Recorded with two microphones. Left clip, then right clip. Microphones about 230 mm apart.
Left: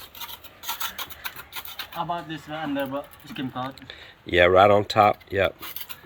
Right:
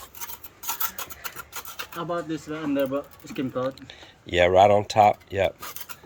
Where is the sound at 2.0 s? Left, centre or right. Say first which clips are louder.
Even; right.